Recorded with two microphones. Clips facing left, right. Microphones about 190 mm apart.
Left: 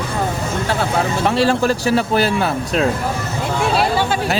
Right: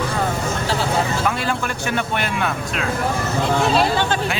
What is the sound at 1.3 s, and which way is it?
Speech, 30° left (ahead or behind).